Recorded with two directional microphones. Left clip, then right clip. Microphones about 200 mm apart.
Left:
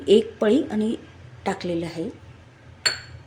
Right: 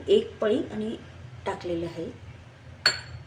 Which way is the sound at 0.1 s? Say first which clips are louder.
Left 5 dB; 55° left (ahead or behind).